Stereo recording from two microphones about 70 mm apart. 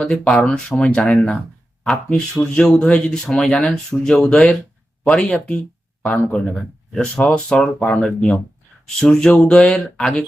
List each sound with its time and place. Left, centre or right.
0.0 s speech: centre